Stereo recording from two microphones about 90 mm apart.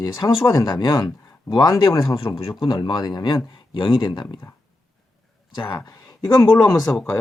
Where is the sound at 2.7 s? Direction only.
45° left (ahead or behind).